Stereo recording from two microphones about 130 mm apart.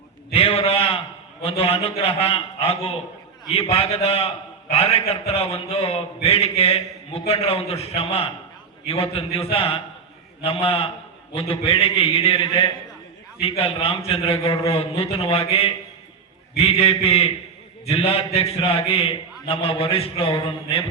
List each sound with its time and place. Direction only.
0.3 s a man's voice: 45° left (ahead or behind)